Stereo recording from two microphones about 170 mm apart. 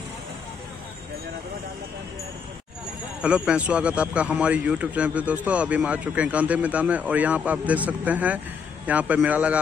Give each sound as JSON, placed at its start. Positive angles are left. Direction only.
{"t": 3.2, "sound": "a man's voice", "side_deg": -5}